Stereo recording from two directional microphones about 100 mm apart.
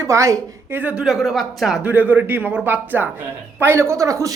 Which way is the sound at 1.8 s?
15° right (ahead or behind).